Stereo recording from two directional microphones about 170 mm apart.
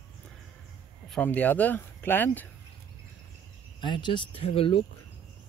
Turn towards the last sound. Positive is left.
turn(degrees=35)  # may be behind; listen again after turning